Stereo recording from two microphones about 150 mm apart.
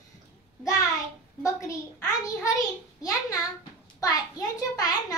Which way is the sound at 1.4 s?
20° left (ahead or behind).